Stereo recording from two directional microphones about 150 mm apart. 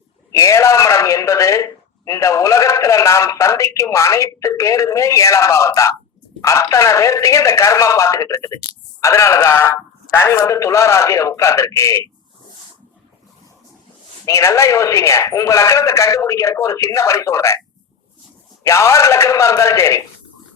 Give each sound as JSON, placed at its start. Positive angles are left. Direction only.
{"t": 0.3, "sound": "a man's voice", "side_deg": 20}
{"t": 14.3, "sound": "a man's voice", "side_deg": 20}
{"t": 18.6, "sound": "a man's voice", "side_deg": 20}